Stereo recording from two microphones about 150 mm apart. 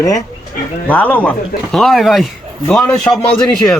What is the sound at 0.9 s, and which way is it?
Speech, 10° left (ahead or behind).